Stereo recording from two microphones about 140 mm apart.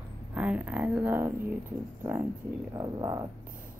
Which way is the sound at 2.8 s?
30° right (ahead or behind).